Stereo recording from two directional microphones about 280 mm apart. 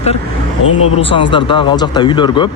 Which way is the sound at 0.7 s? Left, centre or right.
Left.